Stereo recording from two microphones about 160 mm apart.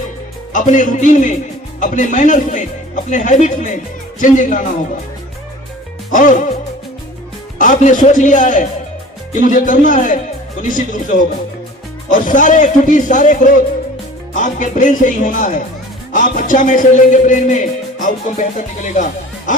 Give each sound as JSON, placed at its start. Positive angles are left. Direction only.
{"t": 0.5, "sound": "speech", "side_deg": 50}
{"t": 6.1, "sound": "music", "side_deg": 55}
{"t": 7.6, "sound": "speech", "side_deg": 50}